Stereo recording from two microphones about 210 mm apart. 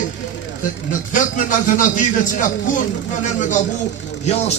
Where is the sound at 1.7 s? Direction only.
40° left (ahead or behind).